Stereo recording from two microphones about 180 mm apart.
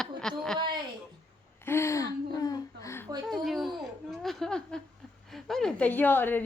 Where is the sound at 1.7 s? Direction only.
15° left (ahead or behind).